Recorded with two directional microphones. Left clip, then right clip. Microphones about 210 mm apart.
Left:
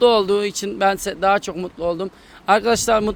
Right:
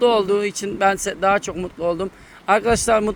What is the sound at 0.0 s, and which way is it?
Speech, 10° left (ahead or behind).